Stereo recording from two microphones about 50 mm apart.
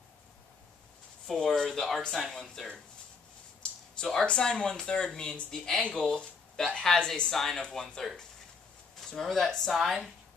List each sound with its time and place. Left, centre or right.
1.2 s speech: centre
4.0 s speech: centre
9.1 s speech: centre